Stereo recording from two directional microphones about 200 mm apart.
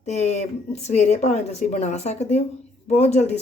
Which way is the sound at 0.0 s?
35° left (ahead or behind).